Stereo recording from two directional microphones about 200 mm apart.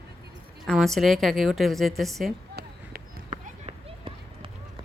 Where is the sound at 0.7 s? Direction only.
Centre (ahead or behind).